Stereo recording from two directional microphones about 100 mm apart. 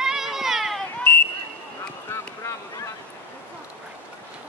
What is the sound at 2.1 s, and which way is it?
Boat, 25° left (ahead or behind).